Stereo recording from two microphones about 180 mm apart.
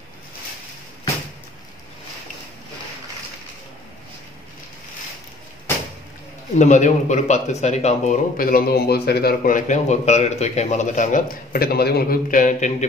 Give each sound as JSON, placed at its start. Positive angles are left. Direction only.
{"t": 6.6, "sound": "speech", "side_deg": 40}